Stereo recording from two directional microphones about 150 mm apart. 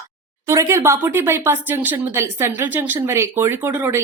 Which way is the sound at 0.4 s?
20° right (ahead or behind).